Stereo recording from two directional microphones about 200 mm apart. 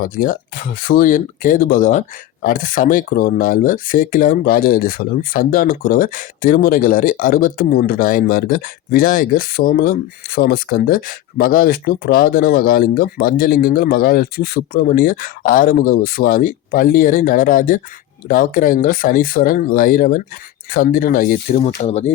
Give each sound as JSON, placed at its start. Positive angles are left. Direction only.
{"t": 0.0, "sound": "speech", "side_deg": 45}